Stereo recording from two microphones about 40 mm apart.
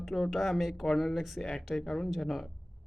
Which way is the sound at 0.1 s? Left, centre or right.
Centre.